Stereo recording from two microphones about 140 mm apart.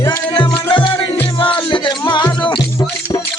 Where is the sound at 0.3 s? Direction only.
35° left (ahead or behind).